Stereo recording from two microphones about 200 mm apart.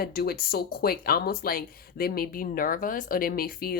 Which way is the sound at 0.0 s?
50° left (ahead or behind).